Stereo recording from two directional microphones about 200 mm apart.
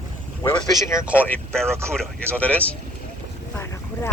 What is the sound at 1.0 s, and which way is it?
Speech, 5° right (ahead or behind).